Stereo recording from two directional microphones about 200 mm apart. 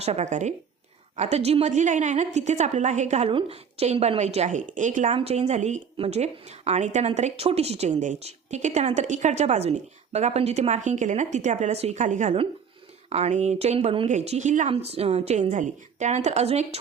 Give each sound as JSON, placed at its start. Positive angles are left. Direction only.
{"t": 0.0, "sound": "a woman's voice", "side_deg": -35}